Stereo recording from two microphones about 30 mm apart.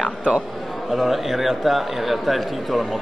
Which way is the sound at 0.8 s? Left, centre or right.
Centre.